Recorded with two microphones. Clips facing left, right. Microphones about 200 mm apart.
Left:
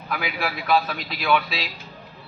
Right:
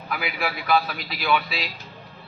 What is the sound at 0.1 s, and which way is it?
A man's voice, centre (ahead or behind).